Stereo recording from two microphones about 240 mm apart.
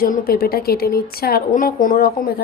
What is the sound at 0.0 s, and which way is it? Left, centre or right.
A woman's voice, left.